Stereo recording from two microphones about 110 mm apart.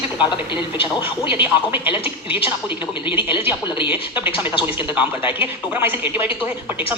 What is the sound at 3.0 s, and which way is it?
Speech, 15° right (ahead or behind).